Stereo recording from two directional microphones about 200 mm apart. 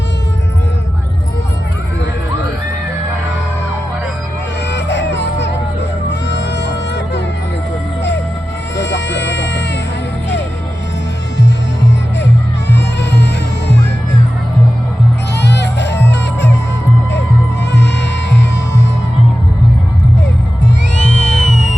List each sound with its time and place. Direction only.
4.7 s music: 60° left (ahead or behind)
8.7 s baby cry: 60° left (ahead or behind)
11.3 s music: 60° left (ahead or behind)
15.4 s music: 60° left (ahead or behind)
18.3 s music: 60° left (ahead or behind)
20.9 s music: 65° left (ahead or behind)
21.5 s music: 40° left (ahead or behind)